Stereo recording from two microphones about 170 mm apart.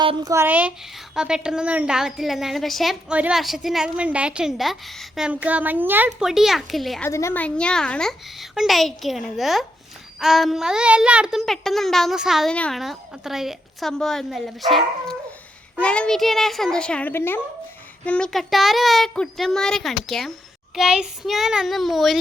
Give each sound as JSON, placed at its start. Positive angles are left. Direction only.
{"t": 0.0, "sound": "a woman's voice", "side_deg": -25}
{"t": 7.0, "sound": "a woman's voice", "side_deg": 15}